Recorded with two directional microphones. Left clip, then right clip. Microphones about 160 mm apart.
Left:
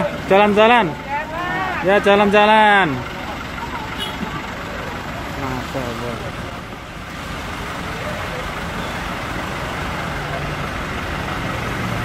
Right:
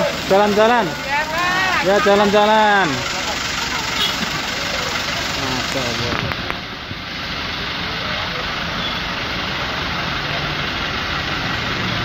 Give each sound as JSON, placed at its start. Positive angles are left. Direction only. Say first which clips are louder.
{"t": 0.3, "sound": "speech", "louder": "left 2 dB", "side_deg": 25}
{"t": 1.9, "sound": "speech", "louder": "left 2 dB", "side_deg": 10}
{"t": 2.3, "sound": "speech", "louder": "left 1 dB", "side_deg": 25}